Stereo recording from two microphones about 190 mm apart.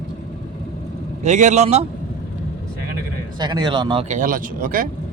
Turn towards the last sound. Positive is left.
turn(degrees=-50)  # may be behind; listen again after turning